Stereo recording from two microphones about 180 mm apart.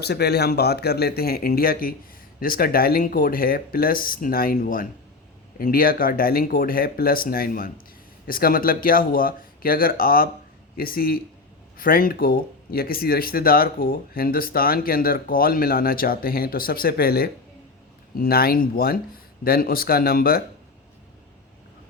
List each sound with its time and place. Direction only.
0.0 s speech: 65° left (ahead or behind)